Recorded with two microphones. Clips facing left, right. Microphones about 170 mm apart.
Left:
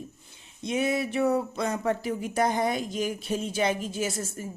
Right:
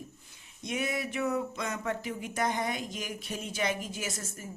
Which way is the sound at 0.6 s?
25° left (ahead or behind).